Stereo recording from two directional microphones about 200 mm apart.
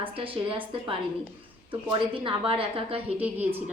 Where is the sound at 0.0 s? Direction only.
25° right (ahead or behind).